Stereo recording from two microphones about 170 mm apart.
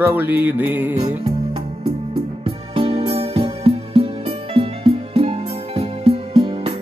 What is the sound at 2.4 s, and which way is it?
Music, 30° right (ahead or behind).